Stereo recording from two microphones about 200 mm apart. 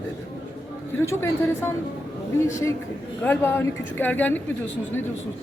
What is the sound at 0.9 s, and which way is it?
A woman's voice, 10° left (ahead or behind).